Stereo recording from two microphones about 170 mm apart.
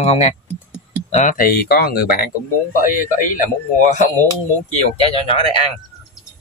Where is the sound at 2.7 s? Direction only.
55° left (ahead or behind).